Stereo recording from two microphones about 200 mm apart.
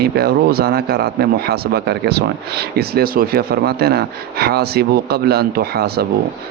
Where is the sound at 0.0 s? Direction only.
50° right (ahead or behind).